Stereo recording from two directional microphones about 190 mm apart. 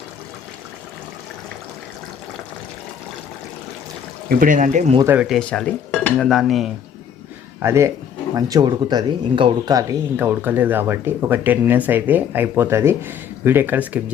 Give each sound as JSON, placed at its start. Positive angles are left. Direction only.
{"t": 4.3, "sound": "speech", "side_deg": -45}
{"t": 5.0, "sound": "cutlery", "side_deg": -5}
{"t": 7.6, "sound": "speech", "side_deg": -15}